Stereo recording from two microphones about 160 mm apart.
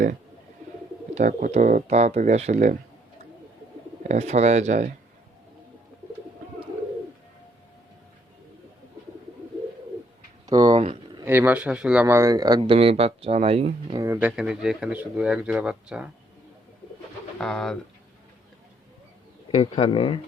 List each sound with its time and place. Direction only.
1.1 s speech: 55° right (ahead or behind)
4.0 s speech: 45° right (ahead or behind)
10.4 s a sound: 25° right (ahead or behind)
11.3 s speech: 10° right (ahead or behind)
12.0 s speech: 15° right (ahead or behind)
12.7 s speech: 40° right (ahead or behind)
13.9 s speech: 20° right (ahead or behind)
14.2 s speech: 5° right (ahead or behind)
17.3 s speech: 5° left (ahead or behind)
19.5 s speech: 40° left (ahead or behind)